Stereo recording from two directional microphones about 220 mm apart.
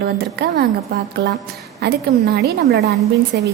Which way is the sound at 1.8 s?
45° right (ahead or behind).